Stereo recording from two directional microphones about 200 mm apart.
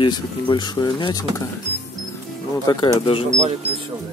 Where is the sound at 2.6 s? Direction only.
20° left (ahead or behind).